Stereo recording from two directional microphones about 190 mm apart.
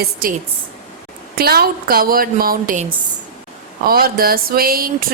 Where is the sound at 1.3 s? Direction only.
55° right (ahead or behind).